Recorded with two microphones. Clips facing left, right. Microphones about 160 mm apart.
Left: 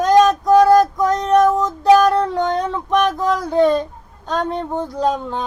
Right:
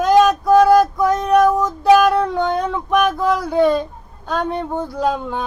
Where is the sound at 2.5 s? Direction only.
10° right (ahead or behind).